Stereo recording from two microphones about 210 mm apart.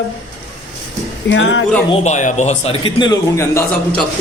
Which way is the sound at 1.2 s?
60° left (ahead or behind).